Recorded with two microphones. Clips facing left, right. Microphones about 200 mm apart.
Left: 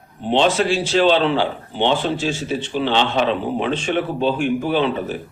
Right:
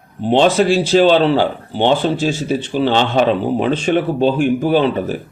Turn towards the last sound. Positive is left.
turn(degrees=-40)  # may be behind; listen again after turning